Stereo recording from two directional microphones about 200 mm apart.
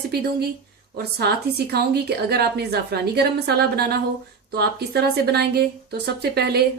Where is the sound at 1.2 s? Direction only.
50° right (ahead or behind).